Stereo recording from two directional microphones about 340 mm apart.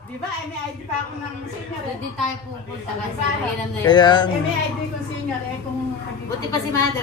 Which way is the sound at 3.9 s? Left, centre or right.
Centre.